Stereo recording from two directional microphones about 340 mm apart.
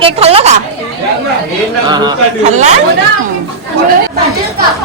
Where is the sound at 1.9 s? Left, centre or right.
Centre.